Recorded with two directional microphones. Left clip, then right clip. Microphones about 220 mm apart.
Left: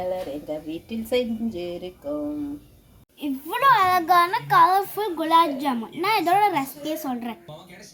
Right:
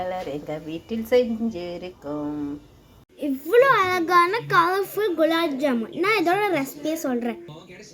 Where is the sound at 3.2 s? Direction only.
Centre (ahead or behind).